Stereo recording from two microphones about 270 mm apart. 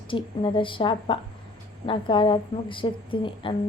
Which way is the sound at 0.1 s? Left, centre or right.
Centre.